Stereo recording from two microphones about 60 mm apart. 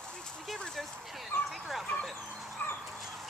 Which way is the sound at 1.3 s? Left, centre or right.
Left.